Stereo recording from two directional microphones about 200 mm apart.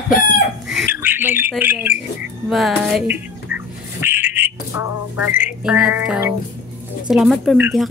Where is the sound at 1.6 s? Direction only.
10° right (ahead or behind).